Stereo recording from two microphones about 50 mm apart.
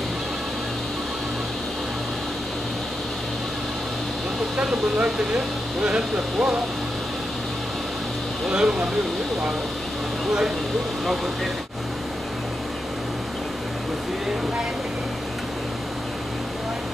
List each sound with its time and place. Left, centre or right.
4.6 s speech: right
8.5 s speech: centre